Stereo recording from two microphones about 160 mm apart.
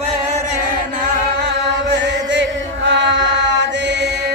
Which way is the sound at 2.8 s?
90° right.